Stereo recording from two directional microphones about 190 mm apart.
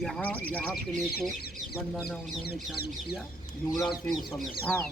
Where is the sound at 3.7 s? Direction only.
15° left (ahead or behind).